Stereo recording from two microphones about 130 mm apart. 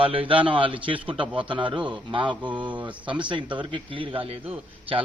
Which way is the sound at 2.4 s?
10° right (ahead or behind).